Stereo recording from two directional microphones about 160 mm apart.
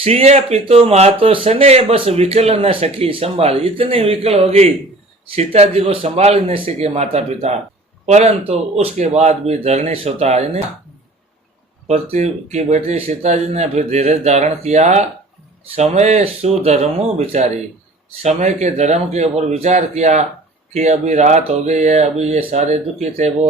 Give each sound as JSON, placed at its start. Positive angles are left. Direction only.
{"t": 0.0, "sound": "speech", "side_deg": -40}
{"t": 11.9, "sound": "speech", "side_deg": -45}